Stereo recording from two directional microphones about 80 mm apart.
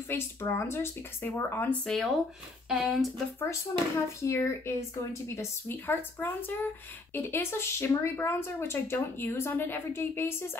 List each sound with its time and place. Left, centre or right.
0.1 s speech: left
1.9 s speech: centre
2.7 s speech: centre
3.7 s speech: left